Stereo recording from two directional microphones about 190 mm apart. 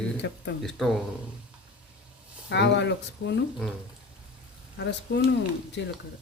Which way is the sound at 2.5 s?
65° left (ahead or behind).